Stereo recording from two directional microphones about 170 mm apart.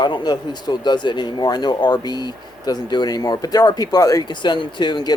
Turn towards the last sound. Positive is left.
turn(degrees=25)  # may be behind; listen again after turning